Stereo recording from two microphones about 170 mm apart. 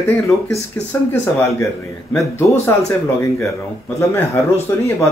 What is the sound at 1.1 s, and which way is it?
Speech, 15° left (ahead or behind).